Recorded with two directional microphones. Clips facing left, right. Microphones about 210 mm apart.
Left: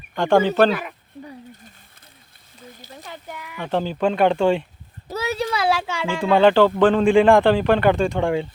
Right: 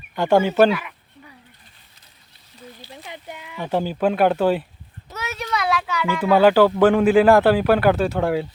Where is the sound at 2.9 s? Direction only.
20° right (ahead or behind).